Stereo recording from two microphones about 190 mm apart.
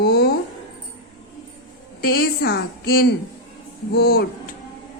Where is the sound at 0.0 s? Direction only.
55° left (ahead or behind).